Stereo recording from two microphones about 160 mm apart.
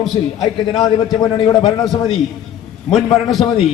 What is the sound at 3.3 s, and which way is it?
Speech, centre (ahead or behind).